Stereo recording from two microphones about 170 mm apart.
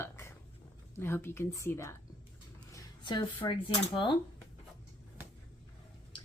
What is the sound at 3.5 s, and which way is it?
Speech, 30° left (ahead or behind).